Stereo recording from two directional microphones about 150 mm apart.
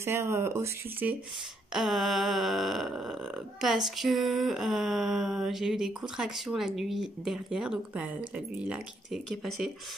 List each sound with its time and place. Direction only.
0.0 s speech: 15° right (ahead or behind)
1.7 s speech: centre (ahead or behind)